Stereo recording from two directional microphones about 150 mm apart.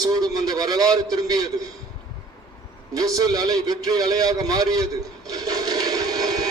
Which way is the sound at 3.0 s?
25° right (ahead or behind).